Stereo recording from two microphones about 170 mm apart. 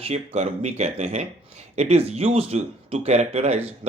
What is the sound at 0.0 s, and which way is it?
Speech, 35° right (ahead or behind).